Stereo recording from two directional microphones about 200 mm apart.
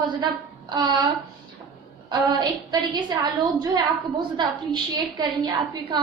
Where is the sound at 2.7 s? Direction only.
20° right (ahead or behind).